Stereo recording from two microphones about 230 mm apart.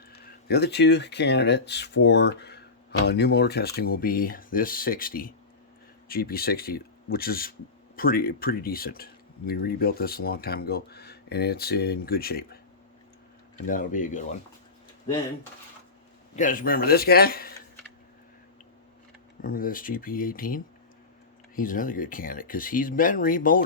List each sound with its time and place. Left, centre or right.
0.1 s speech: left
13.7 s speech: left
16.3 s speech: left
19.4 s speech: left